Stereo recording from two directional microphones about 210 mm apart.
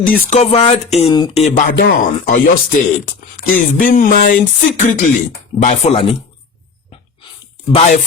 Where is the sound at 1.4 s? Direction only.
35° left (ahead or behind).